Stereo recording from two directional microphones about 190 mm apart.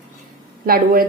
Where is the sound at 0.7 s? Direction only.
50° right (ahead or behind).